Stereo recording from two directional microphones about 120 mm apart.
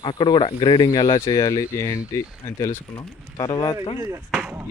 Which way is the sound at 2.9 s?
40° left (ahead or behind).